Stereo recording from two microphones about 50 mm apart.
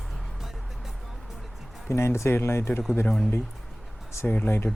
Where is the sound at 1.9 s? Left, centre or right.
Left.